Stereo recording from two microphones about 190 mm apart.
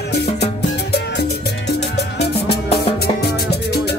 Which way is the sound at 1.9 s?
60° left (ahead or behind).